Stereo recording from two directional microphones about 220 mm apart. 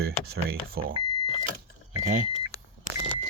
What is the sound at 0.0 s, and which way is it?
Speech, 45° right (ahead or behind).